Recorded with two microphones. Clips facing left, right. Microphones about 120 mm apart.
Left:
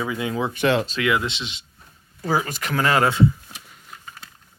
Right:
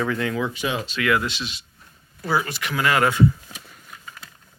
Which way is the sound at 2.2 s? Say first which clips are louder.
Left 1 dB; 40° left (ahead or behind).